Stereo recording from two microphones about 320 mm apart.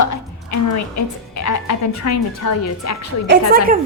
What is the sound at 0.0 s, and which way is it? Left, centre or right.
A woman's voice, left.